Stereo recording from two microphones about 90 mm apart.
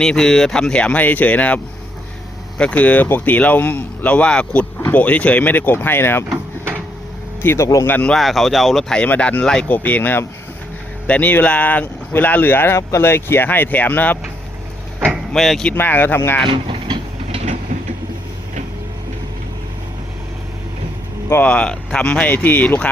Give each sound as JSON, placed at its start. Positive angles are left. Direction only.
{"t": 0.0, "sound": "speech", "side_deg": 5}
{"t": 7.4, "sound": "speech", "side_deg": 30}
{"t": 7.9, "sound": "speech", "side_deg": 20}
{"t": 8.1, "sound": "speech", "side_deg": 0}
{"t": 9.0, "sound": "speech", "side_deg": 15}
{"t": 9.7, "sound": "speech", "side_deg": 20}
{"t": 15.3, "sound": "speech", "side_deg": 5}
{"t": 15.7, "sound": "speech", "side_deg": 20}
{"t": 16.5, "sound": "vehicle", "side_deg": -75}
{"t": 21.4, "sound": "speech", "side_deg": 10}